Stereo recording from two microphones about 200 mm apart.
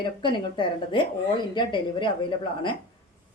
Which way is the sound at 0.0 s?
25° left (ahead or behind).